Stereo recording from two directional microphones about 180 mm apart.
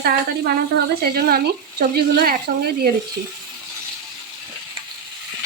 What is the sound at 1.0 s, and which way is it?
Speech, 60° right (ahead or behind).